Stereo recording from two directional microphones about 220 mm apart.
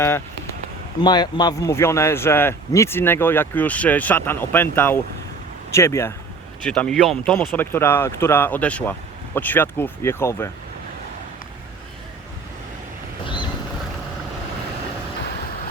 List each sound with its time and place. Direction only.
1.0 s a man's voice: 20° left (ahead or behind)
13.2 s vehicle: 20° left (ahead or behind)